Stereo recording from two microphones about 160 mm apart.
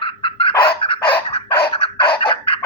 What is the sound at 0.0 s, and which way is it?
Fowl, 35° left (ahead or behind).